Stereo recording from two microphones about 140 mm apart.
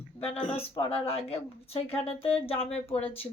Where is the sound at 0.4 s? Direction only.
45° left (ahead or behind).